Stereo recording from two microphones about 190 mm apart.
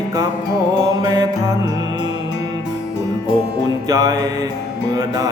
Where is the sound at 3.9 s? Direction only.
20° right (ahead or behind).